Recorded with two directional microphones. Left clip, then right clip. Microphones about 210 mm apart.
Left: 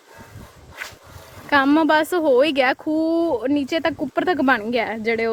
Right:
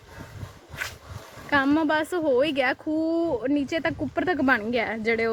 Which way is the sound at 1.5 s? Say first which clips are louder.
Left 6 dB; 30° left (ahead or behind).